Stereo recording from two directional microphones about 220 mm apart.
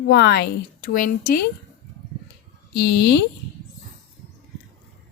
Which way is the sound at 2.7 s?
50° left (ahead or behind).